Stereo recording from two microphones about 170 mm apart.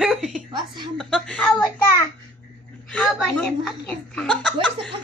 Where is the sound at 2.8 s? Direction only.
Centre (ahead or behind).